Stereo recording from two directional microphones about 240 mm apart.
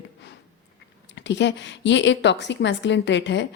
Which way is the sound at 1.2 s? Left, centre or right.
Left.